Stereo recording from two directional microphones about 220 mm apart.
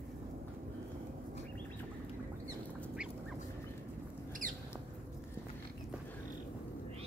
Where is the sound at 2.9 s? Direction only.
5° right (ahead or behind).